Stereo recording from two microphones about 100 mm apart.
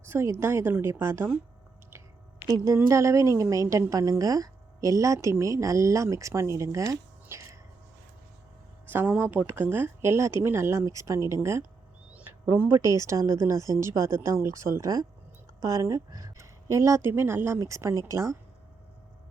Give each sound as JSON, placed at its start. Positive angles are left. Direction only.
{"t": 0.0, "sound": "speech", "side_deg": -25}
{"t": 2.5, "sound": "a woman's voice", "side_deg": -35}
{"t": 8.9, "sound": "a woman's voice", "side_deg": -20}